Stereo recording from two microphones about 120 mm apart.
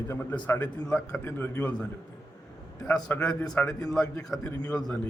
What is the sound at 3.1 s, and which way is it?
Speech, 5° left (ahead or behind).